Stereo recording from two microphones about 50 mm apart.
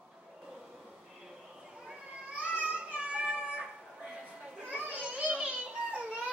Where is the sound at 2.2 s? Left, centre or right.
Right.